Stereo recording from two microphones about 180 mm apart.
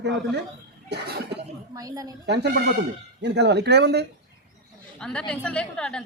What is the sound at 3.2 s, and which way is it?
Speech, 70° right (ahead or behind).